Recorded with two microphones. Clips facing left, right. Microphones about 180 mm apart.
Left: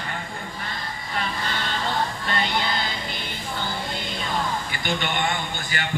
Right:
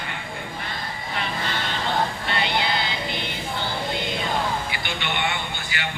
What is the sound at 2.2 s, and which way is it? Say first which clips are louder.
Music: even; 45° left (ahead or behind).